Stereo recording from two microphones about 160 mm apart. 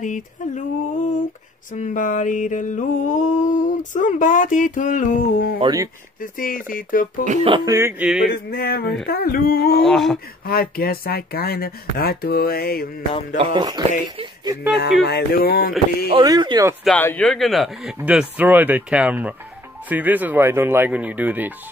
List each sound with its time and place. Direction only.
0.0 s a sound: 50° left (ahead or behind); by 5.6 s 70° left (ahead or behind)
5.6 s speech: 25° right (ahead or behind)
6.3 s speech: 60° left (ahead or behind)
7.6 s speech: 20° right (ahead or behind)
8.0 s speech: 5° right (ahead or behind)
8.3 s speech: 65° left (ahead or behind)
9.8 s speech: centre (ahead or behind)
10.4 s speech: 70° left (ahead or behind)
13.4 s speech: 30° right (ahead or behind)
14.8 s speech: 90° left; by 15.7 s 65° left (ahead or behind)
16.1 s speech: 25° right (ahead or behind)
16.8 s speech: 10° left (ahead or behind); by 21.5 s 10° right (ahead or behind)